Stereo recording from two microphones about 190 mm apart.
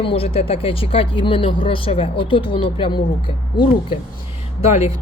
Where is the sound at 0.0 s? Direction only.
30° left (ahead or behind).